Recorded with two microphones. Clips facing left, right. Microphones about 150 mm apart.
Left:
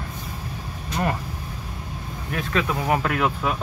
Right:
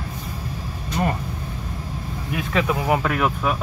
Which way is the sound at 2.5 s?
5° right (ahead or behind).